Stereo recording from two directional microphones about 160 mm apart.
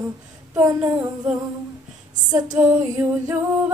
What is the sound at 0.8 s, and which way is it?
Music, 5° right (ahead or behind).